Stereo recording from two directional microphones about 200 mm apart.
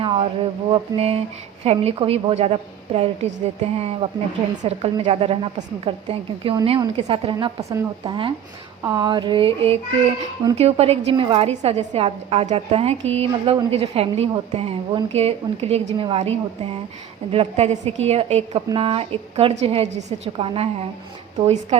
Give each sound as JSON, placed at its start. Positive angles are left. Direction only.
{"t": 0.0, "sound": "a woman's voice", "side_deg": -25}